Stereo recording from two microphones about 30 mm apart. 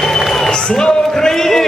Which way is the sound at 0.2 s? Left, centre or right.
Centre.